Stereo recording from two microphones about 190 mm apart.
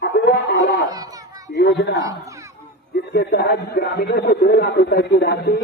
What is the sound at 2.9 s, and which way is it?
Speech, 60° left (ahead or behind).